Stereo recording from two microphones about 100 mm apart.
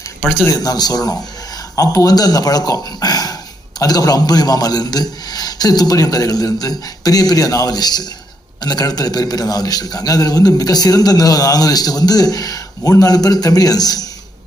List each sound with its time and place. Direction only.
0.4 s a man's voice: 40° left (ahead or behind)